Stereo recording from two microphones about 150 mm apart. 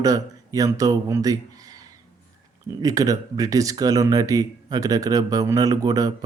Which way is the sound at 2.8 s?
25° right (ahead or behind).